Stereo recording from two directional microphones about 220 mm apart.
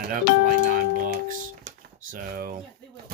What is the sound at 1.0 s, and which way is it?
Music, 40° right (ahead or behind).